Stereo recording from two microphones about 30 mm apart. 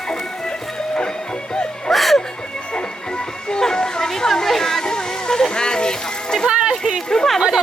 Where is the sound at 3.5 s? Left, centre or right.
Left.